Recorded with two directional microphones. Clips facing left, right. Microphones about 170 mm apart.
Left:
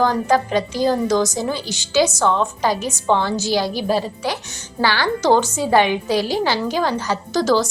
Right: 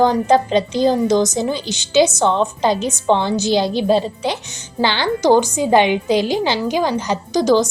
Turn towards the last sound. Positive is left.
turn(degrees=-15)  # may be behind; listen again after turning